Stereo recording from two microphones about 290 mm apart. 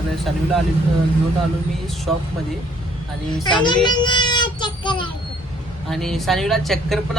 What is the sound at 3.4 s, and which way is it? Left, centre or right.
Speech, centre.